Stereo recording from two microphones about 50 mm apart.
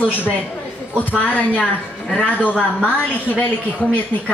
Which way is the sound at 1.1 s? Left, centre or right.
Left.